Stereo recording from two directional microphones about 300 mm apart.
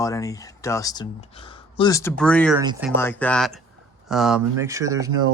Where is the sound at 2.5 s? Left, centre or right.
Centre.